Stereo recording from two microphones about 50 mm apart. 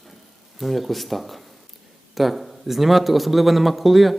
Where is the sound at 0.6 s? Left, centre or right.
Centre.